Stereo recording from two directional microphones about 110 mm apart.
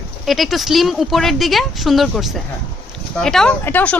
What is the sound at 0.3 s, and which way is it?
Speech, centre (ahead or behind).